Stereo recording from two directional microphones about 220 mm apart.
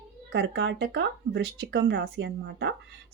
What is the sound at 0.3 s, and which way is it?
Speech, 50° right (ahead or behind).